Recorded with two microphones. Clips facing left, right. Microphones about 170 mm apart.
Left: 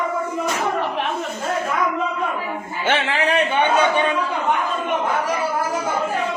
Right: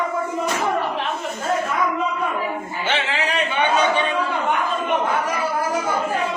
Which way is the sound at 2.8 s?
50° left (ahead or behind).